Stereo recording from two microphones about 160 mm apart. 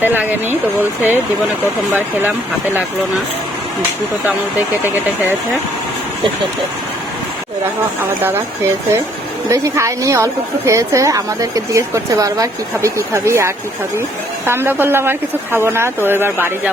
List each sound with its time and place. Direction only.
0.0 s speech: 10° right (ahead or behind)
8.2 s a woman's voice: 15° right (ahead or behind)